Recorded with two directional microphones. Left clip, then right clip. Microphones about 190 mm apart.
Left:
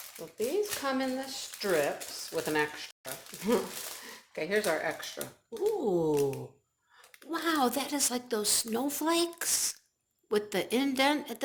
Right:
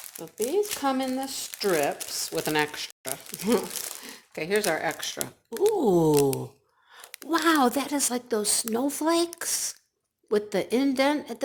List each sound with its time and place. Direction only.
0.3 s a woman's voice: 50° right (ahead or behind); by 11.4 s 30° right (ahead or behind)